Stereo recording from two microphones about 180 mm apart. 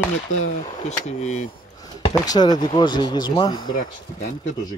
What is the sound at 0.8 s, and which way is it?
Speech, 40° left (ahead or behind).